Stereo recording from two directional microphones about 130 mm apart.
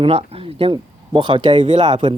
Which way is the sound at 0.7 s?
40° right (ahead or behind).